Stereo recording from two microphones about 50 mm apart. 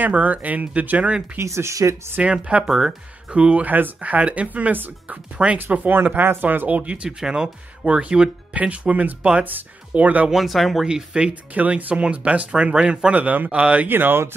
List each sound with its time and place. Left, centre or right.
0.0 s speech: right
1.4 s speech: right
2.2 s speech: right
3.3 s speech: right
3.6 s speech: right
6.4 s speech: right
6.8 s speech: right
7.1 s speech: centre; by 10.3 s right
10.3 s speech: centre
11.1 s speech: right
13.8 s speech: right